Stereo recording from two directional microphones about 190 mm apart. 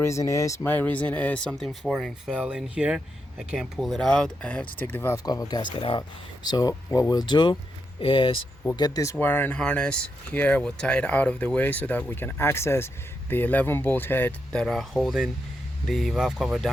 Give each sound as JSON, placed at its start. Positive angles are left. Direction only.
{"t": 0.0, "sound": "speech", "side_deg": 15}